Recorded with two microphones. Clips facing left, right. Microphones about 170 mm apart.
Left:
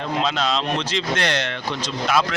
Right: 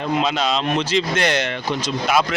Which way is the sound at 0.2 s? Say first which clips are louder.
Right 2 dB; 5° right (ahead or behind).